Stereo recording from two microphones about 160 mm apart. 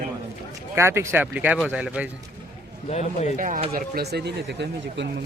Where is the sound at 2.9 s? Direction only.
45° left (ahead or behind).